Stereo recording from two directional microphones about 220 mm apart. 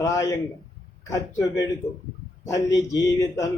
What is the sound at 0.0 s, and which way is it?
A man's voice, 15° left (ahead or behind).